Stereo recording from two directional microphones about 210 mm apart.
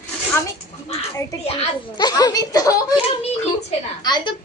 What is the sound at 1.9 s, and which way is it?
A woman's voice, 20° left (ahead or behind).